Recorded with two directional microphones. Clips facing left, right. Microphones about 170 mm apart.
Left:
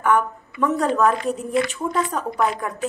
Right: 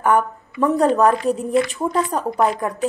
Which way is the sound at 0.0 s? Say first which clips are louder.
Right 2 dB; 35° right (ahead or behind).